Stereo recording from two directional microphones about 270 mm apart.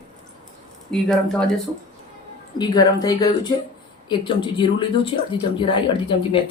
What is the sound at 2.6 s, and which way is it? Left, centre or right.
Speech, centre.